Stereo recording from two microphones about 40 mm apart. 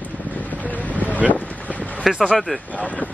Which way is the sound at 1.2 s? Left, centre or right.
Right.